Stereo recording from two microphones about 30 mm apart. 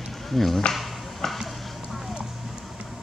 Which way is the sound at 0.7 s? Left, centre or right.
Centre.